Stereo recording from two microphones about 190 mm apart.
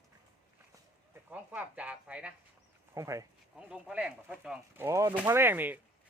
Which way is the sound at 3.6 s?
5° right (ahead or behind).